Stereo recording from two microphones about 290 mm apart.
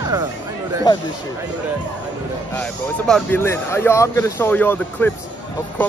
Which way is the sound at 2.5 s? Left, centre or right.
Centre.